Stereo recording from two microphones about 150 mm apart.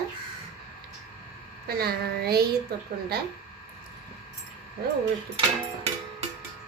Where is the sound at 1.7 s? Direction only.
90° right.